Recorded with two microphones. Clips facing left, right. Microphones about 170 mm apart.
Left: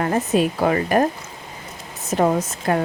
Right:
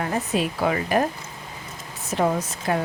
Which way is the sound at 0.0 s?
45° left (ahead or behind).